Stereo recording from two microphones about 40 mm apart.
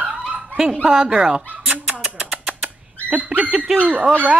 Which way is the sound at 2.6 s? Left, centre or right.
Right.